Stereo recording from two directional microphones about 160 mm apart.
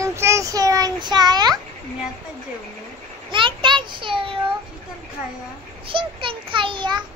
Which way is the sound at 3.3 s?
30° right (ahead or behind).